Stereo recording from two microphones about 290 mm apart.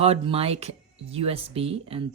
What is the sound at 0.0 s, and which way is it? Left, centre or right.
Speech, centre.